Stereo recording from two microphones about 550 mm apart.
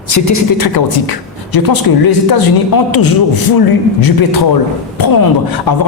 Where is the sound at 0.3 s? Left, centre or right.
Left.